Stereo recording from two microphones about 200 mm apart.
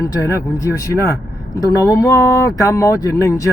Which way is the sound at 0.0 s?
15° left (ahead or behind).